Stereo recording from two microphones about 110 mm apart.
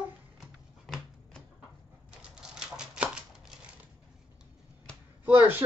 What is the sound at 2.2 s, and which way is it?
Typewriter, 5° right (ahead or behind).